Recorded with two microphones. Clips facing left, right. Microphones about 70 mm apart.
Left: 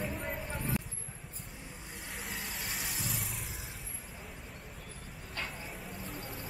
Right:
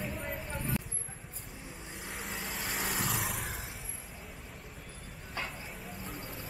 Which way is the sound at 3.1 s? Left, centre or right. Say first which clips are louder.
Right 6 dB; right.